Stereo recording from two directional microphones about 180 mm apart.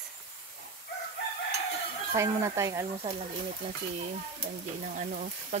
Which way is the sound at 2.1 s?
15° right (ahead or behind).